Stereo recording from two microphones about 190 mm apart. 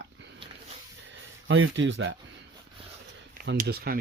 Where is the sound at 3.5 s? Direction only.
55° right (ahead or behind).